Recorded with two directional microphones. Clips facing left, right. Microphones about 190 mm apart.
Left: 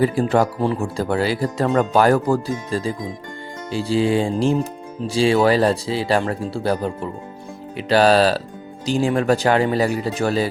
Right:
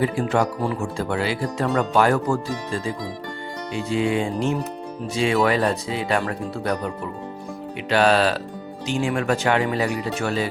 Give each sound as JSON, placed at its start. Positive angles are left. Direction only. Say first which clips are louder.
{"t": 0.0, "sound": "speech", "louder": "left 4 dB", "side_deg": 35}